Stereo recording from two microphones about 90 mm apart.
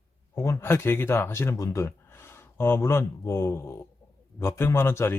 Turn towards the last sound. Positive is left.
turn(degrees=25)  # may be behind; listen again after turning